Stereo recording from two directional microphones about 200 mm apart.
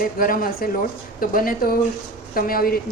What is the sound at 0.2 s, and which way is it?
A woman's voice, 45° left (ahead or behind).